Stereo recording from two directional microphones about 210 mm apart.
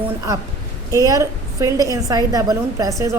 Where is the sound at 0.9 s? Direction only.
15° right (ahead or behind).